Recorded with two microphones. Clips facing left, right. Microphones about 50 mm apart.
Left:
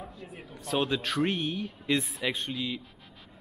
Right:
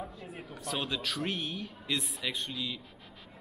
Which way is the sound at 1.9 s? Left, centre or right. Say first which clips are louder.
Left 6 dB; left.